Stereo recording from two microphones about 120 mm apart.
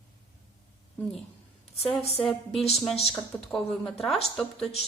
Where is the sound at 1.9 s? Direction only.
20° left (ahead or behind).